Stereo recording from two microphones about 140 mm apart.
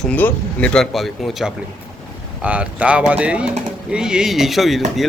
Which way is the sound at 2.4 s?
10° right (ahead or behind).